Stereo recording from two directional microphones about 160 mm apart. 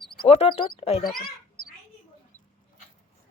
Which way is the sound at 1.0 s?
65° left (ahead or behind).